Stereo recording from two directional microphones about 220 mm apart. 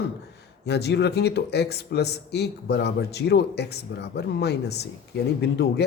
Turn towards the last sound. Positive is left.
turn(degrees=50)  # may be behind; listen again after turning